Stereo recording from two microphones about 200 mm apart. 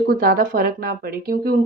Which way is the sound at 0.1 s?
45° right (ahead or behind).